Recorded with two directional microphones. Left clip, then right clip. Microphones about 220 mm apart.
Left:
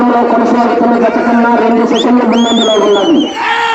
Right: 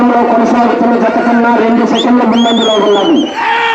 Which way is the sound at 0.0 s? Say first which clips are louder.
Even; 45° right (ahead or behind).